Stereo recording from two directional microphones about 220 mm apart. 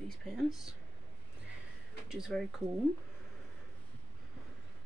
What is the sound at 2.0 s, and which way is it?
Speech, 5° right (ahead or behind).